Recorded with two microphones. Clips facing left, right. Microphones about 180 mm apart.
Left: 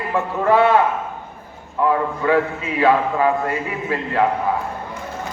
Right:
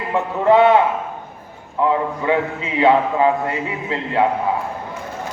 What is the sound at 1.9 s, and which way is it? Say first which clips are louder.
A man's voice: left 1 dB; 20° right (ahead or behind).